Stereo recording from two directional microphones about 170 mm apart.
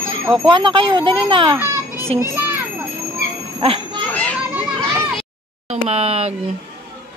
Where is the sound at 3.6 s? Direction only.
30° right (ahead or behind).